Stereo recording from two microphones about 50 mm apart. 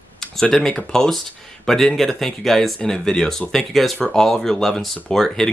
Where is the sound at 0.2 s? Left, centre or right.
Centre.